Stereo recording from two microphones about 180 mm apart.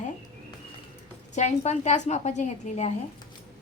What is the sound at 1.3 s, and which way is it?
A woman's voice, 40° left (ahead or behind).